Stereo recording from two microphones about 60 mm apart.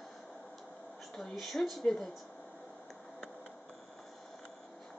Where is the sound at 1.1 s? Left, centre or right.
Centre.